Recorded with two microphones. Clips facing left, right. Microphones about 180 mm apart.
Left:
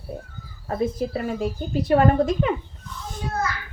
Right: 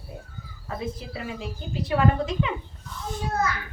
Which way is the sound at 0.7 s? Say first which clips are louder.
Left 9 dB; 45° left (ahead or behind).